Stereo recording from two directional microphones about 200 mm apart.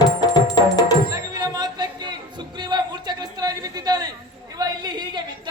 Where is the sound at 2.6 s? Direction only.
20° right (ahead or behind).